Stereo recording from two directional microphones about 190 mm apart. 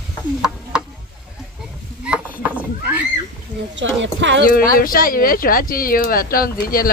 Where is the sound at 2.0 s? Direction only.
5° right (ahead or behind).